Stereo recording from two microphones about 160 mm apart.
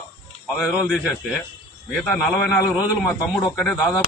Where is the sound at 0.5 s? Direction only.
5° right (ahead or behind).